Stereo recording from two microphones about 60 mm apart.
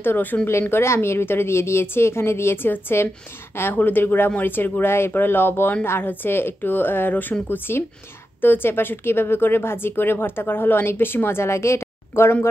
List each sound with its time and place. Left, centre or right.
0.0 s a woman's voice: left